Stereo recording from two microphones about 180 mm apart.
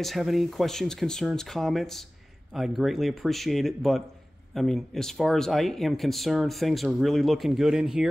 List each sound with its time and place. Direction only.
0.0 s speech: centre (ahead or behind)